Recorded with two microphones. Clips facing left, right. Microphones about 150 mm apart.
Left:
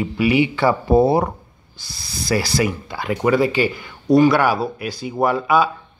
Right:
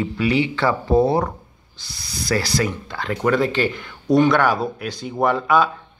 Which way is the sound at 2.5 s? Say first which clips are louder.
Left 2 dB; 10° left (ahead or behind).